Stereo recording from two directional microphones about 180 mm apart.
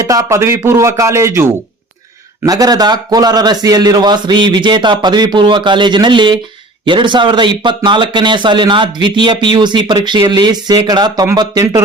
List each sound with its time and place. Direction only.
0.0 s a man's voice: 20° right (ahead or behind)